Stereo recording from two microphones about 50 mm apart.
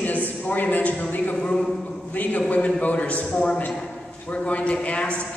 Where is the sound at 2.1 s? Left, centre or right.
Left.